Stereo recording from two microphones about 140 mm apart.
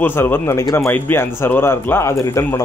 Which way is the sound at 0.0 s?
15° left (ahead or behind).